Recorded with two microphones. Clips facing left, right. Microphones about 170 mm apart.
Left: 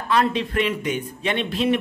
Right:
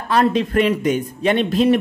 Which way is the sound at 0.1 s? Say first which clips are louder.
Right 5 dB; 40° right (ahead or behind).